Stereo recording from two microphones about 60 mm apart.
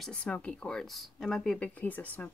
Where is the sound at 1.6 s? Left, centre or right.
Left.